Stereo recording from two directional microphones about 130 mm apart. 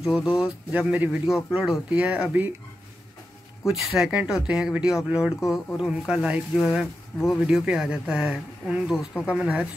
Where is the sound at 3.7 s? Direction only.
5° right (ahead or behind).